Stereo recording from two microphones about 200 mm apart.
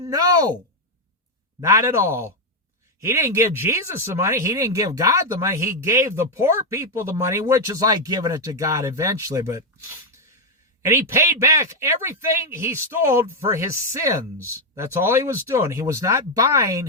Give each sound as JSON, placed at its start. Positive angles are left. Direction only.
{"t": 0.0, "sound": "speech", "side_deg": -20}
{"t": 1.6, "sound": "speech", "side_deg": -15}